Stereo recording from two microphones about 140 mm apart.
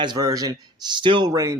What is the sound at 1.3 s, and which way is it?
Speech, 25° right (ahead or behind).